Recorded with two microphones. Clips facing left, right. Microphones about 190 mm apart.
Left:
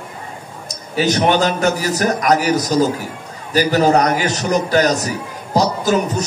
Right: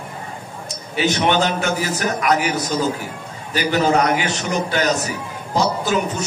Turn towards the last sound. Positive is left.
turn(degrees=40)  # may be behind; listen again after turning